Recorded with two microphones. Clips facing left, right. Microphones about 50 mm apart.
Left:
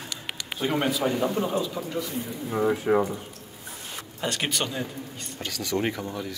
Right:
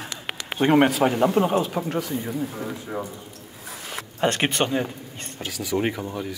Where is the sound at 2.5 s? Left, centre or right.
Left.